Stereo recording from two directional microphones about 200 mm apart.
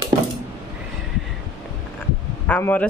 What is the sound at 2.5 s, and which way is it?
Speech, 10° left (ahead or behind).